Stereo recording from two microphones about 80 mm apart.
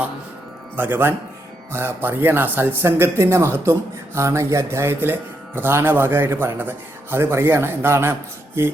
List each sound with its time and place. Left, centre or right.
0.8 s a man's voice: right